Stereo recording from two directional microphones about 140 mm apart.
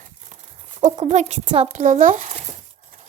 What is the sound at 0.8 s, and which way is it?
Speech, 55° right (ahead or behind).